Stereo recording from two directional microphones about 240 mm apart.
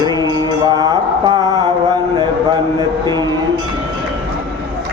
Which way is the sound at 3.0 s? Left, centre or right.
Centre.